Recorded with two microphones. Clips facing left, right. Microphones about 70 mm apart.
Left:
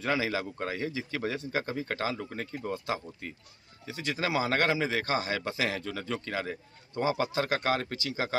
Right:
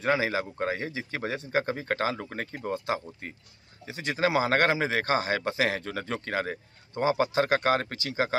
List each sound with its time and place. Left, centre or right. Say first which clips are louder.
0.0 s speech: right 3 dB; right
6.9 s speech: right 3 dB; right